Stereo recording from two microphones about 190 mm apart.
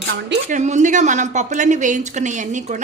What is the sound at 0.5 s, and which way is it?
A woman's voice, 40° right (ahead or behind).